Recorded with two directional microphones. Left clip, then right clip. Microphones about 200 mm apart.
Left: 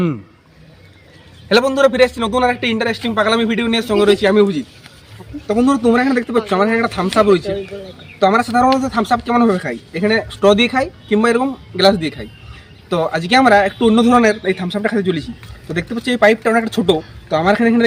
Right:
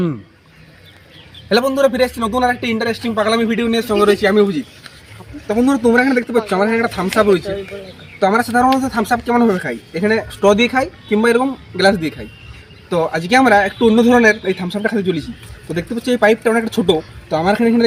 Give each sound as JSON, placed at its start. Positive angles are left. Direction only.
{"t": 1.5, "sound": "a man's voice", "side_deg": 0}
{"t": 4.1, "sound": "speech", "side_deg": 25}
{"t": 5.5, "sound": "a man's voice", "side_deg": 5}